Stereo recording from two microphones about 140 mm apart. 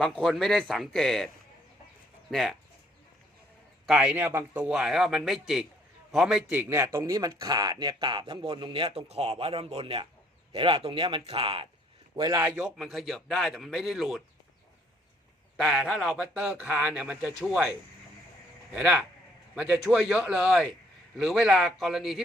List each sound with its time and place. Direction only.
0.0 s speech: centre (ahead or behind)
2.3 s speech: centre (ahead or behind)
3.8 s a man's voice: 5° right (ahead or behind)
4.7 s a man's voice: 5° right (ahead or behind)
6.5 s speech: 15° right (ahead or behind); by 11.7 s 40° right (ahead or behind)
12.1 s a man's voice: 25° right (ahead or behind)
12.5 s speech: 5° right (ahead or behind)
15.5 s speech: centre (ahead or behind)
18.7 s a man's voice: 5° right (ahead or behind)